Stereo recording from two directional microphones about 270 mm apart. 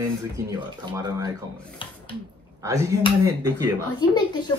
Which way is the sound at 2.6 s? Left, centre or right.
Centre.